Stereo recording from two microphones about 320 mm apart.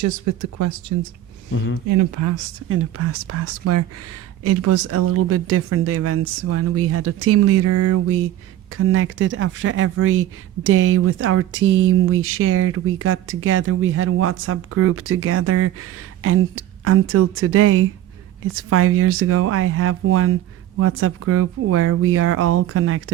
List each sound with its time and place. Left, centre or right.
0.0 s speech: right
1.5 s speech: left
1.9 s speech: right
2.6 s speech: right